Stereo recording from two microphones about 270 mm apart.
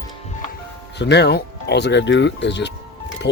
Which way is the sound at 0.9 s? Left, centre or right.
Left.